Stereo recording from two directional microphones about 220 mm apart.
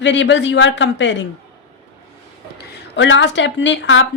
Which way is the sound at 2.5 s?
55° left (ahead or behind).